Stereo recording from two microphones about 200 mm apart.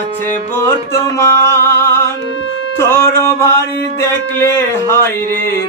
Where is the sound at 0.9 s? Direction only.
15° left (ahead or behind).